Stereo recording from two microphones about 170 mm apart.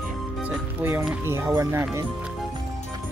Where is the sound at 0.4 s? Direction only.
15° right (ahead or behind).